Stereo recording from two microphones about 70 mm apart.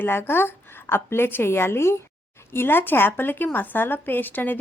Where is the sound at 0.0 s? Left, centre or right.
Left.